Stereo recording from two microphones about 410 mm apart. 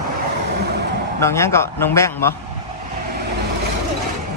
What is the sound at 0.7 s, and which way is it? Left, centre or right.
Vehicle, right.